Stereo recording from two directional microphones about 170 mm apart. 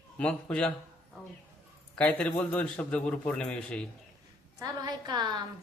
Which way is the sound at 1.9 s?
5° left (ahead or behind).